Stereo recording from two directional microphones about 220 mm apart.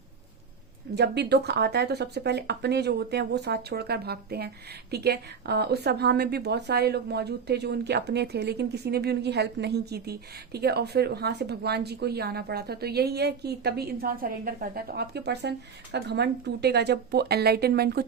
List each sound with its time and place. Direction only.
0.9 s speech: 50° right (ahead or behind)